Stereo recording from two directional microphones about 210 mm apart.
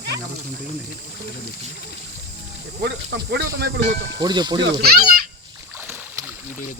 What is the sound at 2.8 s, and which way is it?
Speech, 50° right (ahead or behind).